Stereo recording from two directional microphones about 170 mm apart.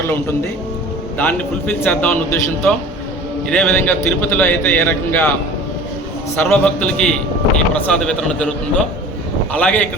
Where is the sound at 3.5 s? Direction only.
5° left (ahead or behind).